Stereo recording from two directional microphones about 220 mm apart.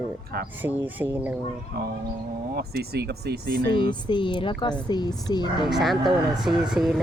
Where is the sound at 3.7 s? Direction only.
20° left (ahead or behind).